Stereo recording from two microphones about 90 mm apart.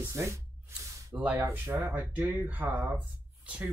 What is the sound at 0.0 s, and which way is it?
Spray, 30° right (ahead or behind).